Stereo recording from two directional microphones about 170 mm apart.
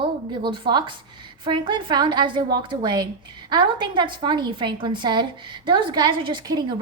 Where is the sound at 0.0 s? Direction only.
30° right (ahead or behind).